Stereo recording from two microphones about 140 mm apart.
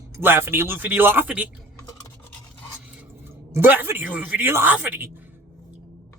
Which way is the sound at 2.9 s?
15° right (ahead or behind).